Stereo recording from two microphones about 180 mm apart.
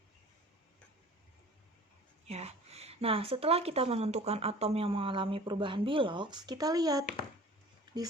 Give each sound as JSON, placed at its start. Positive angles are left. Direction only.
{"t": 2.2, "sound": "speech", "side_deg": -35}